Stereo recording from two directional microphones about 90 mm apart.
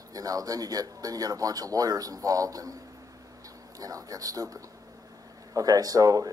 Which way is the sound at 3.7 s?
40° right (ahead or behind).